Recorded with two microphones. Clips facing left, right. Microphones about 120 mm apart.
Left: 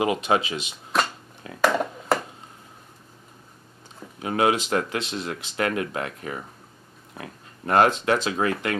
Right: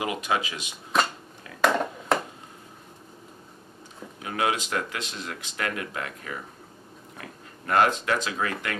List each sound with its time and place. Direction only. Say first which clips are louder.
0.0 s speech: left 5 dB; 25° left (ahead or behind)
0.9 s shuffling cards: even; centre (ahead or behind)
1.6 s a sound: left 1 dB; centre (ahead or behind)
4.2 s speech: left 5 dB; 30° left (ahead or behind)